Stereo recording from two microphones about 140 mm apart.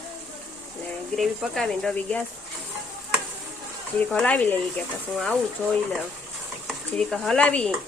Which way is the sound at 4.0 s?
10° left (ahead or behind).